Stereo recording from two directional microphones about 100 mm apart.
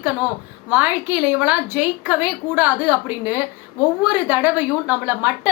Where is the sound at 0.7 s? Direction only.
15° right (ahead or behind).